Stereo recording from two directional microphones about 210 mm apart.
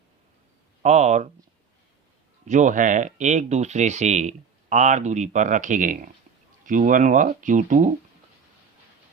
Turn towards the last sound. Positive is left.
turn(degrees=-35)  # may be behind; listen again after turning